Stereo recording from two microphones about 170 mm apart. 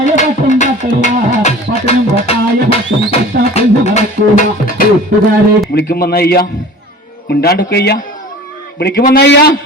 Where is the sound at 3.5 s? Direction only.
40° left (ahead or behind).